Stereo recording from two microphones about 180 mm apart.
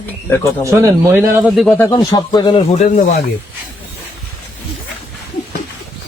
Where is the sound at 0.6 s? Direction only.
15° right (ahead or behind).